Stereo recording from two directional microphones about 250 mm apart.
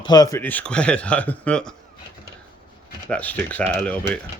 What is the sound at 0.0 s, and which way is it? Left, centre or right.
Speech, centre.